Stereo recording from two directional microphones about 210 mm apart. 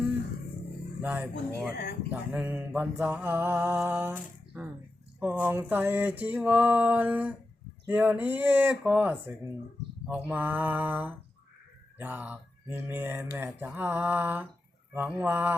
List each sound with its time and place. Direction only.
1.0 s mantra: 10° right (ahead or behind)
1.7 s speech: 50° left (ahead or behind)
2.3 s mantra: 5° right (ahead or behind)